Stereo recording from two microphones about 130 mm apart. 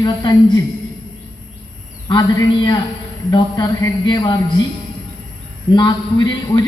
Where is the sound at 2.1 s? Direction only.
30° left (ahead or behind).